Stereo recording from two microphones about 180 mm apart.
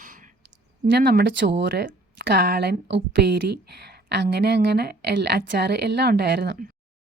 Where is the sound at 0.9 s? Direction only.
65° right (ahead or behind).